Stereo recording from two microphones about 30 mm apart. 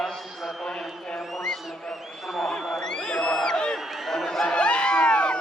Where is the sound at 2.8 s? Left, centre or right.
Left.